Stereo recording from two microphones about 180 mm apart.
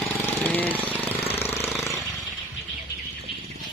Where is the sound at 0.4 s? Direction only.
10° left (ahead or behind).